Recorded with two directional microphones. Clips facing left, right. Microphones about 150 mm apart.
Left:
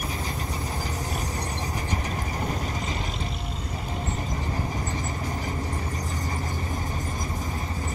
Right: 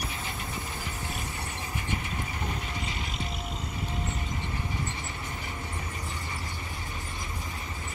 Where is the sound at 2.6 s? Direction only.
40° left (ahead or behind).